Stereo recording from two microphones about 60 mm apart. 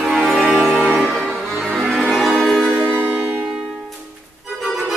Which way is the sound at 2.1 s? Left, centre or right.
Centre.